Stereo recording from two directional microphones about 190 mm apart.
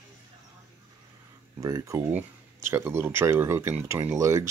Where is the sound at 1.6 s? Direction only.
15° right (ahead or behind).